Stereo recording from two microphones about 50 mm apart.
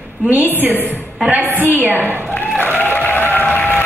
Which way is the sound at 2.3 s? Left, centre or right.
Left.